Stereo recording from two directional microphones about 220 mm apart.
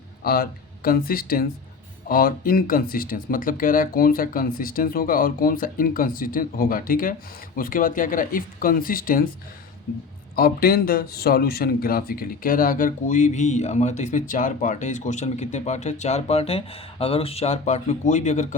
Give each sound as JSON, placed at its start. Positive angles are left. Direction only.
{"t": 0.2, "sound": "speech", "side_deg": 40}
{"t": 10.3, "sound": "speech", "side_deg": 45}